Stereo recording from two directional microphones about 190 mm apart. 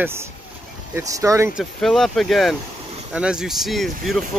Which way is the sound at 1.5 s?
Centre (ahead or behind).